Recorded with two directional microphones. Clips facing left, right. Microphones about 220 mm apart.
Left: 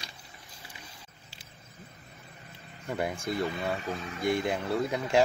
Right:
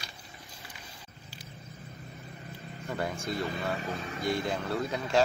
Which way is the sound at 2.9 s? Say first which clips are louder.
Left 2 dB; 15° left (ahead or behind).